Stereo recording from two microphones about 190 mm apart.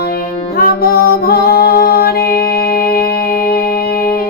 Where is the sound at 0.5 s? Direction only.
50° left (ahead or behind).